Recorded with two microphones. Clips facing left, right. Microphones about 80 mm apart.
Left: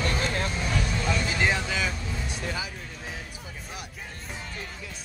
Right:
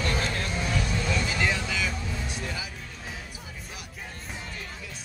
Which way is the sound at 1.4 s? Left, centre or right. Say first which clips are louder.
Left 2 dB; left.